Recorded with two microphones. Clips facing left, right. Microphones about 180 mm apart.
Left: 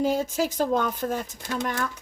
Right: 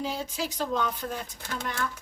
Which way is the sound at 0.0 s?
45° left (ahead or behind).